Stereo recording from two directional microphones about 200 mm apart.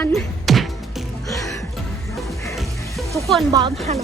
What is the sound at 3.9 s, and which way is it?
Speech, 35° right (ahead or behind).